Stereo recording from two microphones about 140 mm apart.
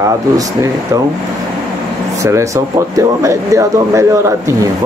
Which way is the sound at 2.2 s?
20° right (ahead or behind).